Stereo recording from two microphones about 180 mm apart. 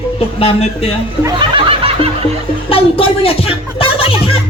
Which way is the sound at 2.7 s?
30° left (ahead or behind).